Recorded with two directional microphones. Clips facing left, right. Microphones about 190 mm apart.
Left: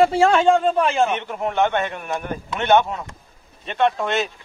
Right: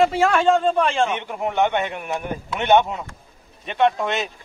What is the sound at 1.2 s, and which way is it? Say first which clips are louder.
A man's voice: even; 15° right (ahead or behind).